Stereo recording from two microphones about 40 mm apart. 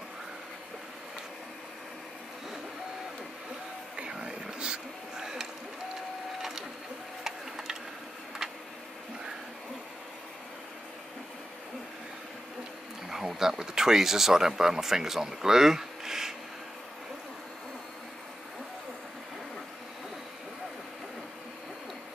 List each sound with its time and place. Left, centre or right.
3.9 s a sound: right
7.2 s printer: centre
13.1 s speech: centre